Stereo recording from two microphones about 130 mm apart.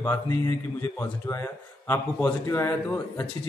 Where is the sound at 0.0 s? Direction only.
15° left (ahead or behind).